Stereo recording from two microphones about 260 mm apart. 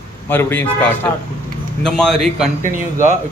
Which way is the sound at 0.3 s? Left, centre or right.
Centre.